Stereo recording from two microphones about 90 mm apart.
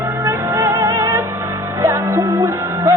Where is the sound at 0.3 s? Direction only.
30° right (ahead or behind).